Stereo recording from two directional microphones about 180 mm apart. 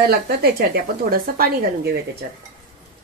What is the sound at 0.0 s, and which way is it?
Speech, 55° right (ahead or behind).